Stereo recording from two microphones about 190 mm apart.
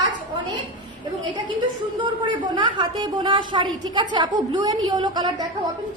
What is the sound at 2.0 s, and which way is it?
A woman's voice, 25° right (ahead or behind).